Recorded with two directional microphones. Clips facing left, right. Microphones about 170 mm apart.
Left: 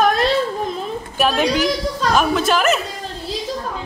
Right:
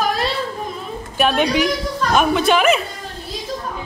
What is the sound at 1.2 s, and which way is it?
A woman's voice, centre (ahead or behind).